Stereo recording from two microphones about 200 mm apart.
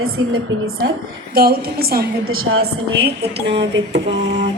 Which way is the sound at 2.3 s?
90° right.